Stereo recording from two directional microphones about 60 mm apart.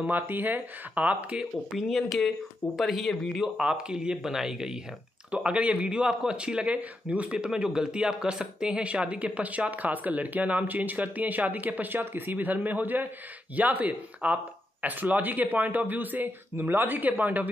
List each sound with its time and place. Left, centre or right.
0.0 s speech: right
1.7 s speech: centre
3.5 s speech: centre
5.3 s speech: right